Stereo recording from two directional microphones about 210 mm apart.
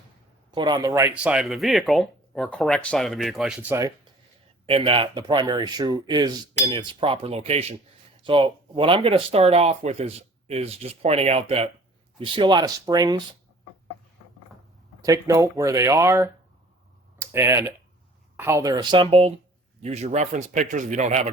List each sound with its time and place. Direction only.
0.5 s speech: 20° right (ahead or behind)
4.6 s speech: 25° right (ahead or behind)
15.0 s speech: 15° right (ahead or behind); by 21.2 s 35° right (ahead or behind)